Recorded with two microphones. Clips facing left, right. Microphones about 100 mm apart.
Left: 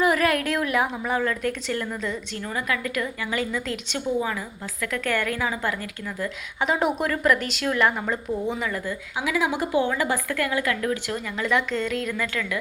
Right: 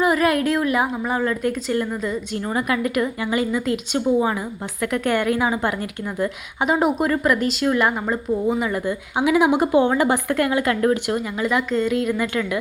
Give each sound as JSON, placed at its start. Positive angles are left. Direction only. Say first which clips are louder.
{"t": 0.0, "sound": "a woman's voice", "louder": "right 3 dB", "side_deg": -5}
{"t": 2.4, "sound": "a woman's voice", "louder": "right 6 dB", "side_deg": -25}
{"t": 6.7, "sound": "a woman's voice", "louder": "right 5 dB", "side_deg": -5}
{"t": 8.7, "sound": "a woman's voice", "louder": "right 6 dB", "side_deg": -20}
{"t": 11.3, "sound": "a woman's voice", "louder": "right 1 dB", "side_deg": -5}
{"t": 12.1, "sound": "a woman's voice", "louder": "right 5 dB", "side_deg": -20}